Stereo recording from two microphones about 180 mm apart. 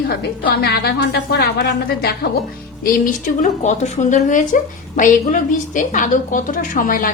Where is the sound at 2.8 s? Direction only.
50° left (ahead or behind).